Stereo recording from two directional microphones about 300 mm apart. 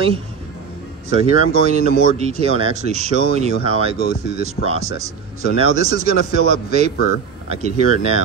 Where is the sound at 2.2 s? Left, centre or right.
Right.